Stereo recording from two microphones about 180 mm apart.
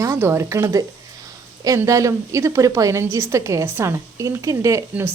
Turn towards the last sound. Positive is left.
turn(degrees=-15)  # may be behind; listen again after turning